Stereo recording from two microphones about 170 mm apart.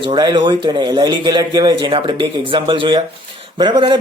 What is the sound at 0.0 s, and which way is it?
Speech, 30° right (ahead or behind).